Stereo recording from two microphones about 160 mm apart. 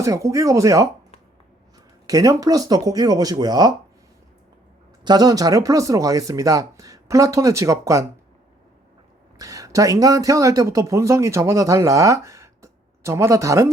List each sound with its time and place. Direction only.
0.0 s speech: 20° right (ahead or behind)
2.0 s speech: 20° right (ahead or behind)
5.0 s speech: 25° right (ahead or behind)
9.4 s speech: 20° right (ahead or behind)